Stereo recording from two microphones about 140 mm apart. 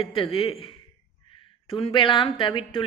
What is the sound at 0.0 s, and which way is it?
Speech, 40° left (ahead or behind).